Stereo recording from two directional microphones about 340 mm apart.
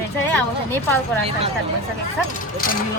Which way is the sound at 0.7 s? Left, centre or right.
Centre.